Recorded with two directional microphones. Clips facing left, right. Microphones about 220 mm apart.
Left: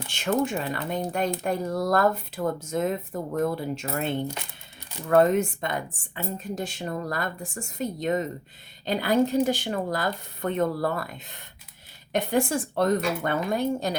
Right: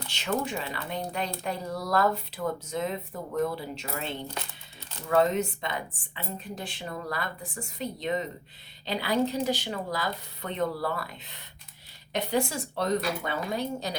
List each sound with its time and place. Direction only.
0.1 s a woman's voice: 50° left (ahead or behind)